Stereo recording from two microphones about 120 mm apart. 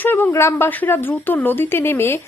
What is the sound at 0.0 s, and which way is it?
Speech, 15° left (ahead or behind).